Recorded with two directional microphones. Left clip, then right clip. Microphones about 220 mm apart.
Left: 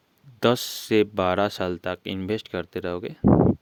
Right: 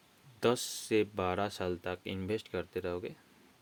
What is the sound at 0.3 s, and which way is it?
Speech, 50° left (ahead or behind).